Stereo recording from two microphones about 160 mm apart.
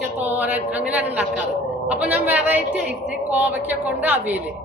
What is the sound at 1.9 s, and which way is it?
A man's voice, 10° right (ahead or behind).